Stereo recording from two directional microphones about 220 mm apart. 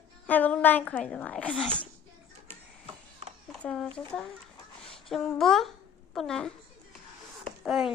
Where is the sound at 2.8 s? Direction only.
30° right (ahead or behind).